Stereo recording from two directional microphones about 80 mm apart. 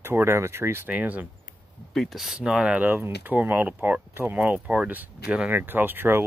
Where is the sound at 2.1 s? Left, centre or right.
Centre; by 6.2 s right.